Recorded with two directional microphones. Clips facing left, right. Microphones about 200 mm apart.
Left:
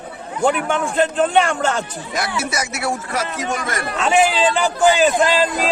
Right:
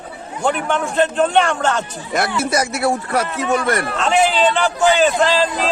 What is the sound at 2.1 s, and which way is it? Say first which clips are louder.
Speech: right 5 dB; 55° right (ahead or behind).